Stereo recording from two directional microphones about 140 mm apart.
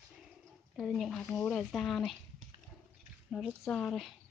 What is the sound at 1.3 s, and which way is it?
Speech, 15° left (ahead or behind).